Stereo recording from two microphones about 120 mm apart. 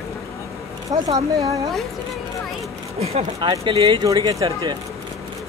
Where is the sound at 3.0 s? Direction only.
60° right (ahead or behind).